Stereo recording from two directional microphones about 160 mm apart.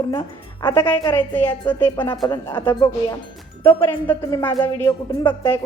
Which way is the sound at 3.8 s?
15° left (ahead or behind).